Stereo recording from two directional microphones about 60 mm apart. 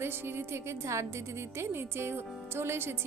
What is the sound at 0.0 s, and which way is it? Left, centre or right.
A woman's voice, right.